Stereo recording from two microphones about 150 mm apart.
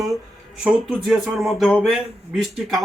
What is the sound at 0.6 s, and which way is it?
A man's voice, 5° right (ahead or behind).